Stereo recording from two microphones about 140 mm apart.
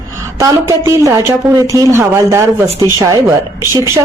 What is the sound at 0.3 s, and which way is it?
A woman's voice, 20° right (ahead or behind).